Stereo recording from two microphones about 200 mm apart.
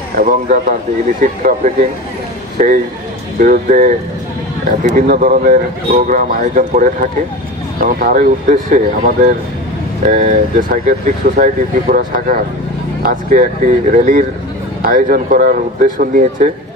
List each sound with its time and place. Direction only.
0.2 s speech: 40° right (ahead or behind)
2.6 s speech: 40° right (ahead or behind)